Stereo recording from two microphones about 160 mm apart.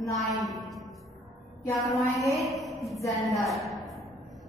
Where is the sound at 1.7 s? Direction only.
Centre (ahead or behind).